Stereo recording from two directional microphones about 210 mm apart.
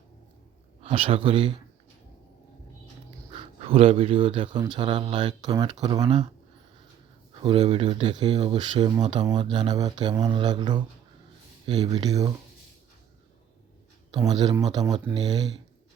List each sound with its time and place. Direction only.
0.8 s speech: 25° right (ahead or behind)
3.3 s speech: 25° right (ahead or behind)
7.4 s speech: 25° right (ahead or behind)
14.2 s speech: 20° right (ahead or behind)